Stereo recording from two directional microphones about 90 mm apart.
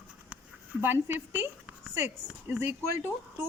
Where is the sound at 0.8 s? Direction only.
20° right (ahead or behind).